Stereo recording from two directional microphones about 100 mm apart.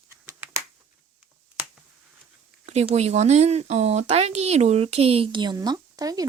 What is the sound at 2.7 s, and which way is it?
Speech, 90° right.